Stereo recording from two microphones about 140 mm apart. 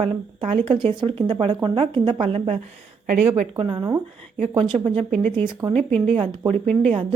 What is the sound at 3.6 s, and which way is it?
A woman's voice, 35° right (ahead or behind).